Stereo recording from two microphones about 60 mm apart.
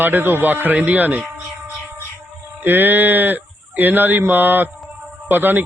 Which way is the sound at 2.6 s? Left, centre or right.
Right.